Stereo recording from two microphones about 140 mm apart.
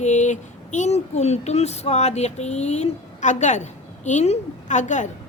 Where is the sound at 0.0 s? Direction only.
55° left (ahead or behind).